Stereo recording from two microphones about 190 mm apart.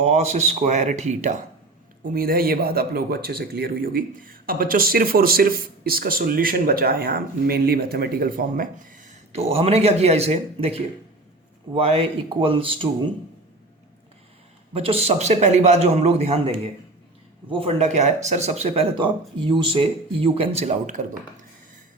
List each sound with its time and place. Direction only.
0.0 s a man's voice: 35° right (ahead or behind)
2.1 s a man's voice: 50° right (ahead or behind); by 12.9 s 30° right (ahead or behind)
14.7 s a man's voice: 30° right (ahead or behind)
17.5 s a man's voice: 30° right (ahead or behind)